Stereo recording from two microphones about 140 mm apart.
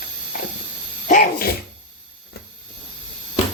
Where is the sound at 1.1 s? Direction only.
90° left.